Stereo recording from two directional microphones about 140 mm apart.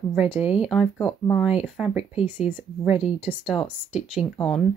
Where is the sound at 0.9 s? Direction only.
10° left (ahead or behind).